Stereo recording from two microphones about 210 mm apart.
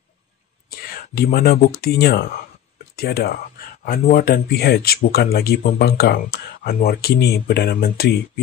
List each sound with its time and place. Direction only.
0.7 s speech: 45° left (ahead or behind)